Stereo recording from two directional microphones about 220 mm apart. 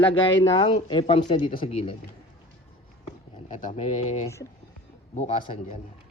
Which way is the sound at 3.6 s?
30° left (ahead or behind).